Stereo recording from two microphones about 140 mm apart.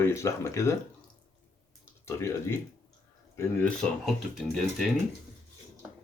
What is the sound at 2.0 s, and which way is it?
Speech, 20° left (ahead or behind).